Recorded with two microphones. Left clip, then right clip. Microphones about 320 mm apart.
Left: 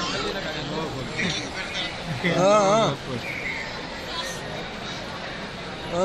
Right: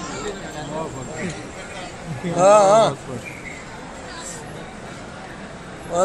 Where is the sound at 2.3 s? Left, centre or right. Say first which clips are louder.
Right 6 dB; right.